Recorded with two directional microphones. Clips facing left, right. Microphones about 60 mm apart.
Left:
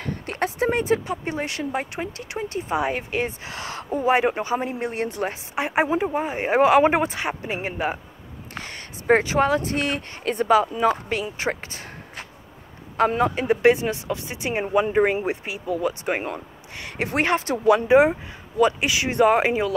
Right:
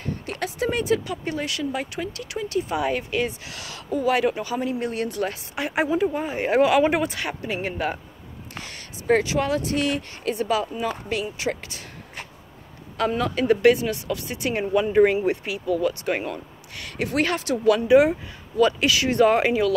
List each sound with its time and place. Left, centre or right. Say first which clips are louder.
0.0 s a sound: even; left
0.4 s speech: left 3 dB; left
8.5 s speech: left 3 dB; left
13.2 s speech: right 3 dB; left